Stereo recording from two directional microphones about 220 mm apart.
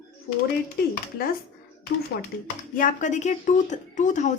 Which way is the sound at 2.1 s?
45° left (ahead or behind).